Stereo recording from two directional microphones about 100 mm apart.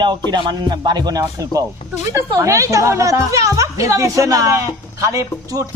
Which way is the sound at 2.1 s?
25° right (ahead or behind).